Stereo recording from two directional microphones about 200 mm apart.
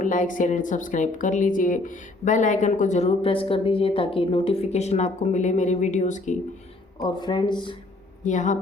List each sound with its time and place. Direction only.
0.0 s a woman's voice: 40° left (ahead or behind)
7.0 s speech: 20° left (ahead or behind)
8.2 s a woman's voice: 40° left (ahead or behind)